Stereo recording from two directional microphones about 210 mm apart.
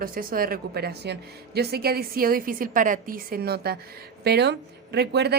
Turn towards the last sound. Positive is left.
turn(degrees=-50)  # may be behind; listen again after turning